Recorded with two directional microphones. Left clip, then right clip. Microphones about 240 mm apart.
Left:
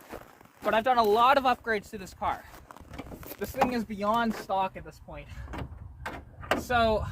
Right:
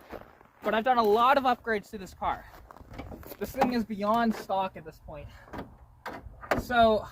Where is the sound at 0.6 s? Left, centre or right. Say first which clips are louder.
Left 1 dB; left.